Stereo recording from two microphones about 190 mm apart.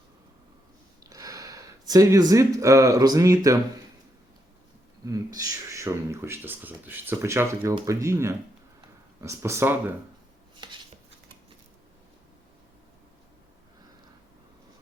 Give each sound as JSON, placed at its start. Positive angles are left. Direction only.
{"t": 1.1, "sound": "speech", "side_deg": -20}
{"t": 5.0, "sound": "speech", "side_deg": -20}